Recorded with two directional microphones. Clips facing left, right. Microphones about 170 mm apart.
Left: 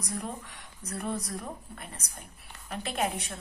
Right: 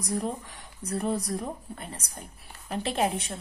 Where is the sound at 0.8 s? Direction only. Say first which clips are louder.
Right 5 dB; 30° right (ahead or behind).